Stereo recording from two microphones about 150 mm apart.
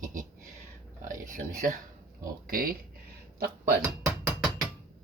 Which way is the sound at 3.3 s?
80° right.